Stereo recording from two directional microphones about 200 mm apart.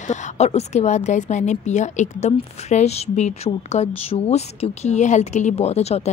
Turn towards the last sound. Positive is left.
turn(degrees=30)  # may be behind; listen again after turning